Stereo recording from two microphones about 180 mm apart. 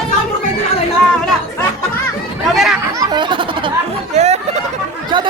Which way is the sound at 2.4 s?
Centre (ahead or behind).